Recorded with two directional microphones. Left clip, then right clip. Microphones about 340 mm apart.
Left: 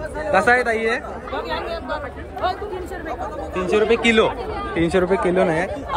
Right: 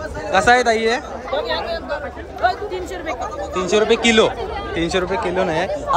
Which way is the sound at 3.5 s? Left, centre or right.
Right.